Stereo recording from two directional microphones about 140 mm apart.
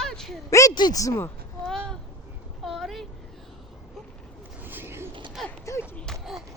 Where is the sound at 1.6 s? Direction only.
5° left (ahead or behind).